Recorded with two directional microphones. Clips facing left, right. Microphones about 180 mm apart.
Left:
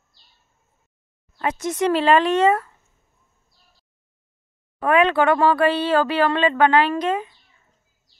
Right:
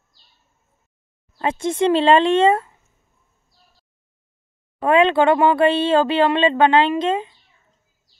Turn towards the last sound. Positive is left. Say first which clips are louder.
# right 2 dB
turn(degrees=-25)  # may be behind; listen again after turning